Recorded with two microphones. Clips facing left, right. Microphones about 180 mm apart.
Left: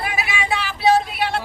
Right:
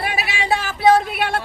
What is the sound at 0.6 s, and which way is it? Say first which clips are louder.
Speech: right 2 dB; 50° right (ahead or behind).